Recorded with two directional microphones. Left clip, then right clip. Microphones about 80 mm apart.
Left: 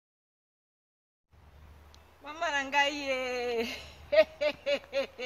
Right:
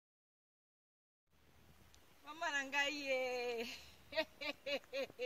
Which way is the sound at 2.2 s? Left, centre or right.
Left.